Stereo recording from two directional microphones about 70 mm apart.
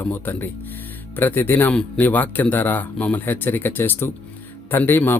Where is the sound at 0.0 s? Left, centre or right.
Left.